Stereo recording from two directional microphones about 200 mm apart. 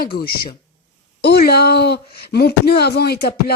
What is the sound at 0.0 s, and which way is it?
A woman's voice, 50° left (ahead or behind).